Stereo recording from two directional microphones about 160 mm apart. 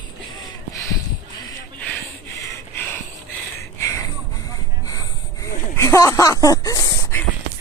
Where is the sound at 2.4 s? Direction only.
15° left (ahead or behind).